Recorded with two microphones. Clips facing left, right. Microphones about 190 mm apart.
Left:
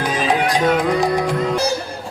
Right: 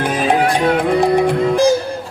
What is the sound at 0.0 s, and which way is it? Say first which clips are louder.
Music: right 3 dB; 55° right (ahead or behind).